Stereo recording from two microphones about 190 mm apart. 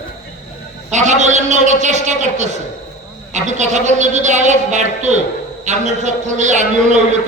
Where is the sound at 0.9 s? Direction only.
40° right (ahead or behind).